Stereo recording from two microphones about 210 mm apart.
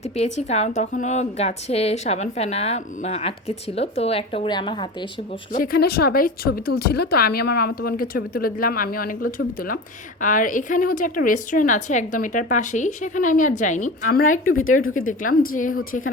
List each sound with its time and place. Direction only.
0.2 s a woman's voice: 30° left (ahead or behind)
5.5 s a woman's voice: 45° left (ahead or behind)